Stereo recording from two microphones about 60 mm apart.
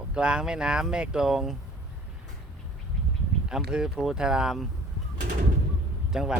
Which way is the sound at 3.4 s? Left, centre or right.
Centre.